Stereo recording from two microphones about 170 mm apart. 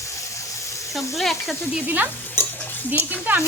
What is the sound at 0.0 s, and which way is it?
Water, 20° left (ahead or behind).